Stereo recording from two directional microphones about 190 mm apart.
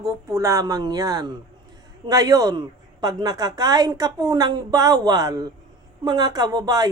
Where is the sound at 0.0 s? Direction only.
15° right (ahead or behind).